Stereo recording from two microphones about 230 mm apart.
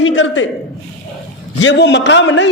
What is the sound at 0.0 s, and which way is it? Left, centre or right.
Speech, left.